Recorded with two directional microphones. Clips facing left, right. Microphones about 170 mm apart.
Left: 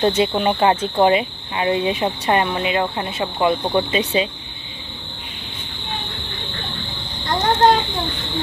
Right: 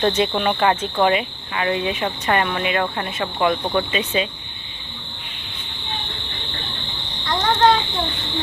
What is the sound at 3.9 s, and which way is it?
Speech, 35° left (ahead or behind).